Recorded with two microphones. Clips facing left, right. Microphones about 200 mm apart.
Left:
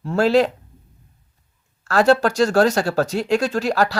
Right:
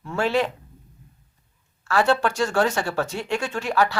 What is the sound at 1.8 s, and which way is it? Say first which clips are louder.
Speech: left 5 dB; 40° left (ahead or behind).